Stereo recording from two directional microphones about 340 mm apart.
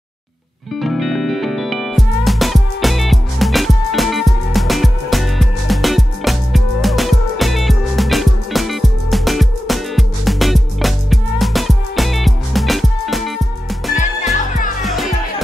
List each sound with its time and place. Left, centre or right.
0.7 s music: centre
13.9 s music: left
14.8 s music: centre